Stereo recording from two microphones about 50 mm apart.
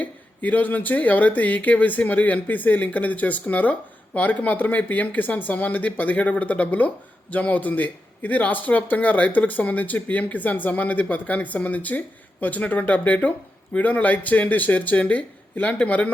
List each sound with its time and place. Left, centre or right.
0.0 s speech: left